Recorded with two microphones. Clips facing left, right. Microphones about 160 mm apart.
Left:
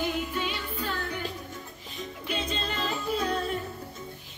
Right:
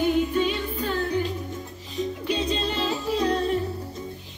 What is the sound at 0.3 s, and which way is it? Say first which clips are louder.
Music: right 8 dB; 35° right (ahead or behind).